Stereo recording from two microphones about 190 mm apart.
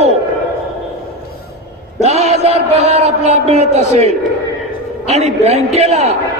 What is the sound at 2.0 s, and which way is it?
A man's voice, 35° right (ahead or behind).